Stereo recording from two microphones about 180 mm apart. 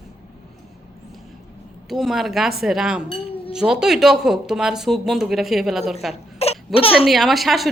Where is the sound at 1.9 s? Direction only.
Centre (ahead or behind).